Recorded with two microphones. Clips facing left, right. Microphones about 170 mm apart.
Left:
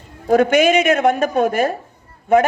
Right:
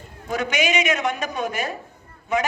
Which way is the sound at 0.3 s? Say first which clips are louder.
Left 11 dB; 55° left (ahead or behind).